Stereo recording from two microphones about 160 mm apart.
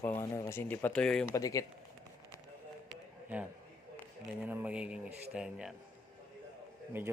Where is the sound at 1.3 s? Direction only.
20° left (ahead or behind).